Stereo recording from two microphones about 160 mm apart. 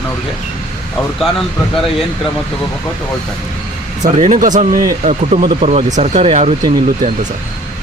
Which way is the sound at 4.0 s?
50° right (ahead or behind).